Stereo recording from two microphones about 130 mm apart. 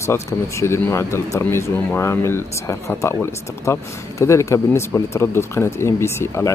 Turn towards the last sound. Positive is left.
turn(degrees=20)  # may be behind; listen again after turning